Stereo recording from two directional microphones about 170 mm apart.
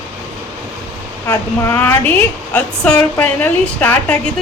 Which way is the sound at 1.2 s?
15° left (ahead or behind).